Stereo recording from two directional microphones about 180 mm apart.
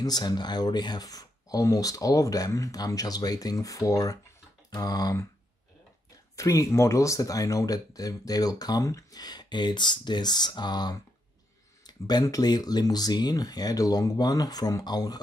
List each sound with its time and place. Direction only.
0.0 s speech: 25° left (ahead or behind)
6.3 s speech: 20° left (ahead or behind)